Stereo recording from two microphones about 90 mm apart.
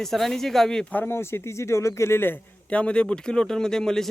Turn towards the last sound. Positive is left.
turn(degrees=5)  # may be behind; listen again after turning